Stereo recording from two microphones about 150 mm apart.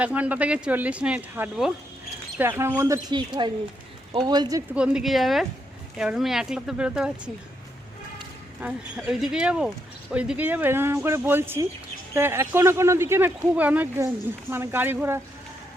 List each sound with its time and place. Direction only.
0.0 s speech: 10° right (ahead or behind); by 4.6 s 25° right (ahead or behind)
4.7 s speech: 5° right (ahead or behind)
8.6 s speech: 5° right (ahead or behind)